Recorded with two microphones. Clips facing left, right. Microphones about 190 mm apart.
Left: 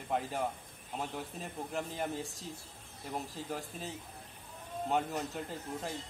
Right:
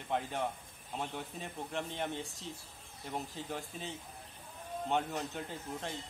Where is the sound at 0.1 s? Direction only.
5° left (ahead or behind).